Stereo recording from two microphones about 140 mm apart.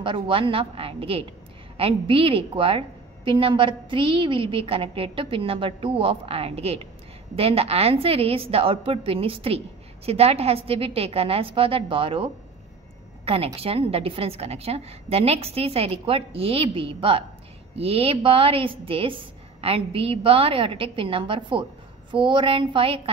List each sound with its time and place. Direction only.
0.0 s a woman's voice: 40° right (ahead or behind)